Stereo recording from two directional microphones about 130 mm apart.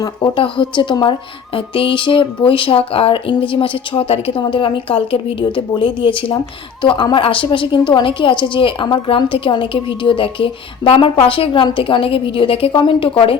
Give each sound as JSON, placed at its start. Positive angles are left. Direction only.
{"t": 0.3, "sound": "a woman's voice", "side_deg": 40}